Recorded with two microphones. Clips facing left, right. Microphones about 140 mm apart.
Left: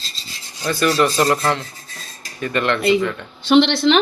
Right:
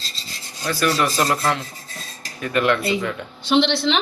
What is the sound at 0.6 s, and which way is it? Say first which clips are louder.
Speech: left 3 dB; centre (ahead or behind).